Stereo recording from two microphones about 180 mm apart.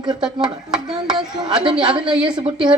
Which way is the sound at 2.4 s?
30° right (ahead or behind).